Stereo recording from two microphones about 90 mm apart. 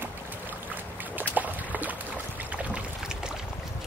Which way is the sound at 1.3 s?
20° right (ahead or behind).